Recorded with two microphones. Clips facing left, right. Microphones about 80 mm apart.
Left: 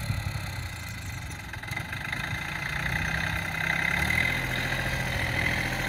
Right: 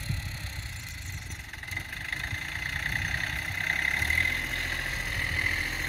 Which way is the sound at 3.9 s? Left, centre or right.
Left.